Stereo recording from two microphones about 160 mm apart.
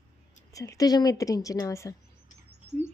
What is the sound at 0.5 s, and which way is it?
A woman's voice, 20° left (ahead or behind).